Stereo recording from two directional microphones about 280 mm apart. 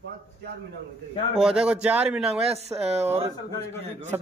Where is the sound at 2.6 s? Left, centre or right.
Right.